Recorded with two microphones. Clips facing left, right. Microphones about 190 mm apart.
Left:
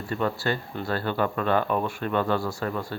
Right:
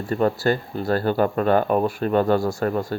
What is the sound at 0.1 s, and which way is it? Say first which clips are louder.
Speech: right 6 dB; 40° right (ahead or behind).